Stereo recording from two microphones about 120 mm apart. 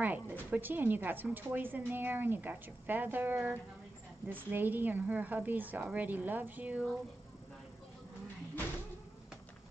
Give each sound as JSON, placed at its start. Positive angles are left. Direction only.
{"t": 0.0, "sound": "a woman's voice", "side_deg": -15}